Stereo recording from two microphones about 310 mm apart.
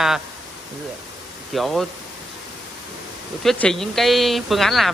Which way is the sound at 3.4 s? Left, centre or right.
Centre.